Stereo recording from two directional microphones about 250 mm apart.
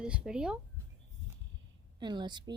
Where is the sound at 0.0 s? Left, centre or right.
Centre.